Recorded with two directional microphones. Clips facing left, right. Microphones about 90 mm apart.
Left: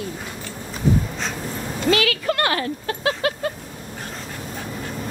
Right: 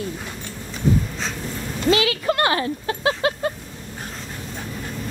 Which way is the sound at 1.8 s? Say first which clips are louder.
Right 1 dB; 25° right (ahead or behind).